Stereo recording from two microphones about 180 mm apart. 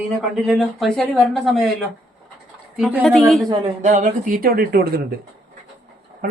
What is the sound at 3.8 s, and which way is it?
Speech, 45° right (ahead or behind).